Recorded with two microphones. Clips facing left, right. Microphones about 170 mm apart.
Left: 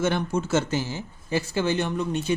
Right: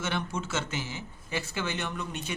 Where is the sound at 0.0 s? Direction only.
45° left (ahead or behind).